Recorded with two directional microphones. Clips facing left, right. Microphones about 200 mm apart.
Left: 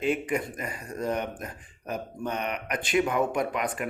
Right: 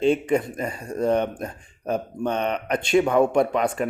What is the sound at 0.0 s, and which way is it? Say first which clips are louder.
Speech: right 7 dB; 25° right (ahead or behind).